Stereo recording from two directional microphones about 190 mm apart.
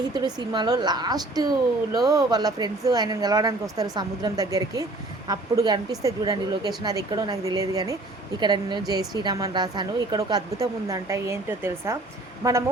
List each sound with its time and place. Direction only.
0.0 s a woman's voice: 20° right (ahead or behind)